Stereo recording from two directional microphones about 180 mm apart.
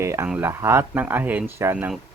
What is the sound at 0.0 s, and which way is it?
Speech, 15° right (ahead or behind).